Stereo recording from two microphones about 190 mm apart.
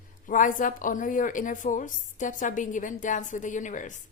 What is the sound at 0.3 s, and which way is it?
A woman's voice, 45° left (ahead or behind).